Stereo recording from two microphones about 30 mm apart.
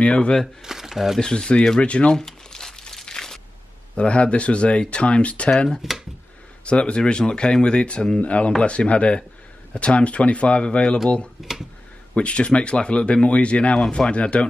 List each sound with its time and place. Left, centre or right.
0.0 s speech: left
0.7 s speech: centre
1.2 s speech: left
1.8 s speech: left
2.1 s crumpling: centre
3.1 s a sound: centre
3.9 s speech: left
5.8 s speech: centre
6.6 s speech: left
12.2 s speech: left